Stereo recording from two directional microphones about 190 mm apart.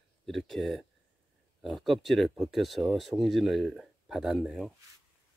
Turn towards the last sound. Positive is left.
turn(degrees=-5)  # may be behind; listen again after turning